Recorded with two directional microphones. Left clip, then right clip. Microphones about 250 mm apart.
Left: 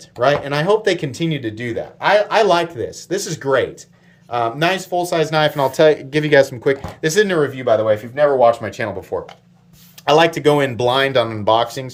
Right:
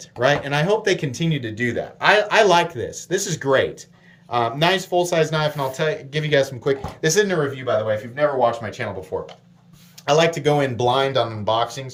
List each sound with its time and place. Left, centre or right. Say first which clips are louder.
0.2 s speech: left 3 dB; centre
5.5 s speech: left 9 dB; centre
7.0 s speech: left 4 dB; centre; by 8.9 s left
10.1 s speech: left 4 dB; centre